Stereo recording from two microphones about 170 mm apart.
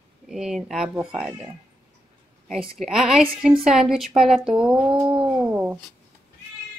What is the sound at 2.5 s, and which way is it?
Speech, centre (ahead or behind).